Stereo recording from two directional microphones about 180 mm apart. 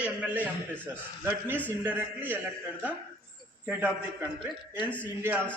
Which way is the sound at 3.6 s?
10° right (ahead or behind).